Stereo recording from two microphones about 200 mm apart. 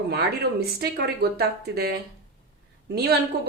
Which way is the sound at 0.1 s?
50° right (ahead or behind).